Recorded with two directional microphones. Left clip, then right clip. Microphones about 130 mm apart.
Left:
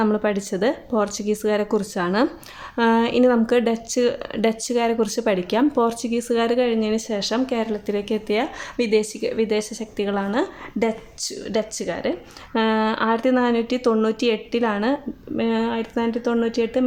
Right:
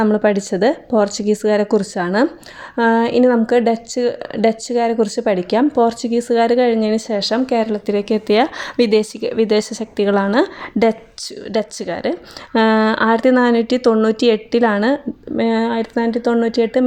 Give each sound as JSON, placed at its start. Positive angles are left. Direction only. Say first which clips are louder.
{"t": 0.0, "sound": "speech", "louder": "right 6 dB", "side_deg": -35}